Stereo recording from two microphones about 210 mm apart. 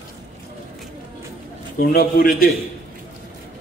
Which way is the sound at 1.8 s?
45° left (ahead or behind).